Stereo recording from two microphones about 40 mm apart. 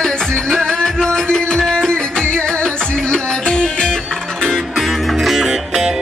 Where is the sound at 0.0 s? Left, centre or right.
Centre.